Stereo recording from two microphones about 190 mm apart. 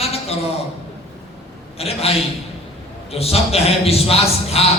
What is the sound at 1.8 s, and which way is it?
A man's voice, 30° left (ahead or behind).